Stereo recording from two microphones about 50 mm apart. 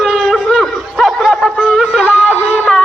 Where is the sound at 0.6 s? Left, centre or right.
Centre.